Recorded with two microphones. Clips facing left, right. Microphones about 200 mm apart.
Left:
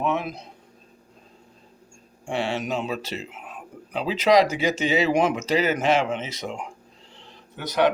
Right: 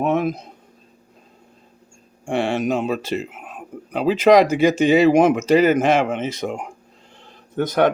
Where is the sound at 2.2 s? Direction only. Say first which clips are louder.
Right 6 dB; 50° right (ahead or behind).